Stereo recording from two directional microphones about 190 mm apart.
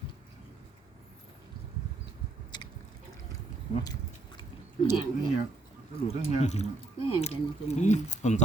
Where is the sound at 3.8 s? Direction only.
20° left (ahead or behind).